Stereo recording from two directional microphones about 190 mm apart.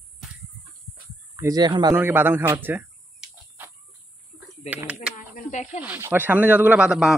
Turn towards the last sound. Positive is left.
turn(degrees=-5)  # may be behind; listen again after turning